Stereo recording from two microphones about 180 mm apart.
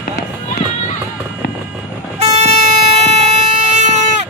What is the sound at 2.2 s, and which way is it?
Vehicle, 35° right (ahead or behind).